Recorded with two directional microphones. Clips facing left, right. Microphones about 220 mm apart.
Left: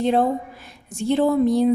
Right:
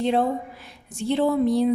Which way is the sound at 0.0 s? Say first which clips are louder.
Left 3 dB; 45° left (ahead or behind).